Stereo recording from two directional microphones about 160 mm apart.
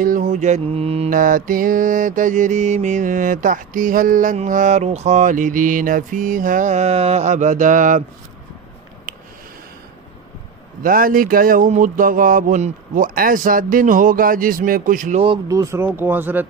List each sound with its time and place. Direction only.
0.0 s mantra: 55° right (ahead or behind)
1.1 s mantra: 55° right (ahead or behind)
10.8 s mantra: 60° right (ahead or behind)
15.4 s speech: 20° right (ahead or behind)